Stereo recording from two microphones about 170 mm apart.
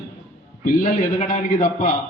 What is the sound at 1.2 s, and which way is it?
Speech, 45° left (ahead or behind).